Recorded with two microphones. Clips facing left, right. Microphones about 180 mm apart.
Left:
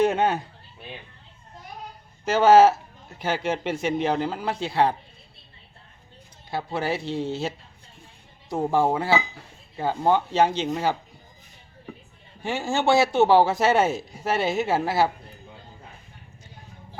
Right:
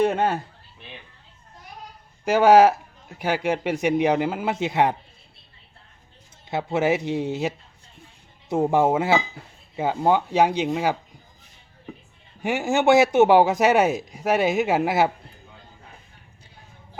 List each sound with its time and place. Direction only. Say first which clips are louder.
0.2 s speech: even; 5° right (ahead or behind)
2.2 s speech: right 1 dB; 10° right (ahead or behind)
6.5 s speech: right 5 dB; 20° right (ahead or behind)
12.4 s speech: right 4 dB; 15° right (ahead or behind)